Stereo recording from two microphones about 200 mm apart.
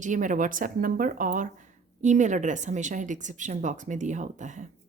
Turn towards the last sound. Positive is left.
turn(degrees=-40)  # may be behind; listen again after turning